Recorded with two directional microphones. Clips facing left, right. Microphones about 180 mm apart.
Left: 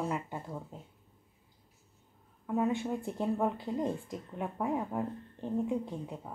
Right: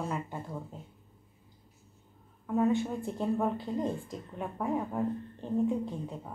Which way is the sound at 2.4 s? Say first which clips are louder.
Right 3 dB; 15° left (ahead or behind).